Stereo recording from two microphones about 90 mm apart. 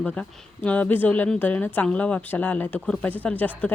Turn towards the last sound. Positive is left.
turn(degrees=20)  # may be behind; listen again after turning